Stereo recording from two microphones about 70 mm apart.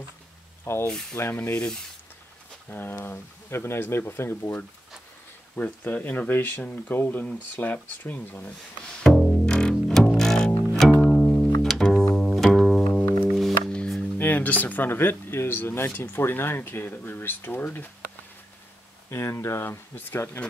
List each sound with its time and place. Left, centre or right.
0.7 s speech: left
1.3 s speech: left
2.7 s speech: left
5.6 s speech: left
8.9 s music: centre
11.6 s bowed string instrument: centre
13.3 s music: centre
14.1 s speech: left
19.0 s speech: left